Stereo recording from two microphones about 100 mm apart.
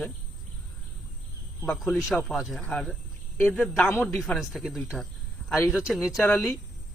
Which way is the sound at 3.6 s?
10° left (ahead or behind).